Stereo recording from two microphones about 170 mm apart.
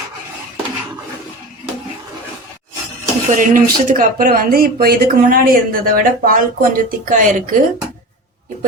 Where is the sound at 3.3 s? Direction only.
50° right (ahead or behind).